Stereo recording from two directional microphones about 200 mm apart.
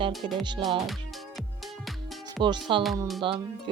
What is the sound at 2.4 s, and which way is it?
Speech, 20° right (ahead or behind).